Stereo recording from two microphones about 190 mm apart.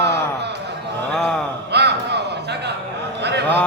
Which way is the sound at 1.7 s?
60° right (ahead or behind).